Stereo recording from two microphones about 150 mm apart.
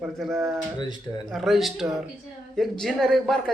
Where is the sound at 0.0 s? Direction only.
Centre (ahead or behind).